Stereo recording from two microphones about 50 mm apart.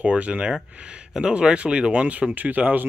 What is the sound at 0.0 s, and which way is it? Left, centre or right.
Speech, right.